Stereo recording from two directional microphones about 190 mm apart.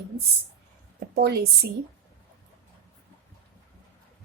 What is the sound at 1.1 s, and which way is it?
Speech, 60° right (ahead or behind).